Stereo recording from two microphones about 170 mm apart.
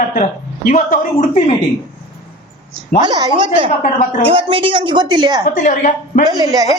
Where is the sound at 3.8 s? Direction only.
50° left (ahead or behind).